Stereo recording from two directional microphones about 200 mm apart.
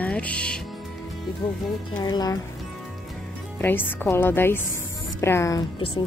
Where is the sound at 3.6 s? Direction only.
10° left (ahead or behind).